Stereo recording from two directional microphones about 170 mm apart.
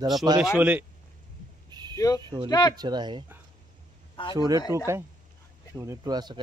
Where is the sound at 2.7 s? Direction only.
25° right (ahead or behind).